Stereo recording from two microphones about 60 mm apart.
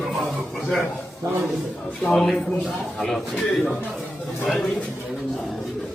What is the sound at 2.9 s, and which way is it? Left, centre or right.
Speech, centre.